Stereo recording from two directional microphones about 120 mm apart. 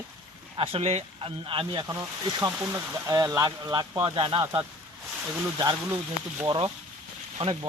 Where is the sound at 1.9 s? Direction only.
30° right (ahead or behind).